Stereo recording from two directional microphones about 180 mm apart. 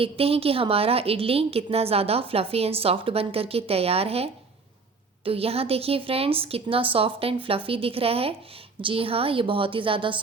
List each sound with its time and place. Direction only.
0.0 s a woman's voice: 30° right (ahead or behind)